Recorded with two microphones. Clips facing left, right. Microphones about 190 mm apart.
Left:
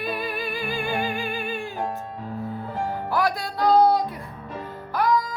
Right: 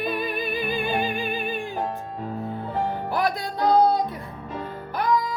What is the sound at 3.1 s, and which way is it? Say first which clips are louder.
Music: left 2 dB; 20° right (ahead or behind).